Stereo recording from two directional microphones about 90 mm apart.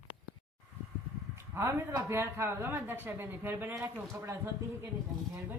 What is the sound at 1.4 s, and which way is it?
A man's voice, 30° right (ahead or behind).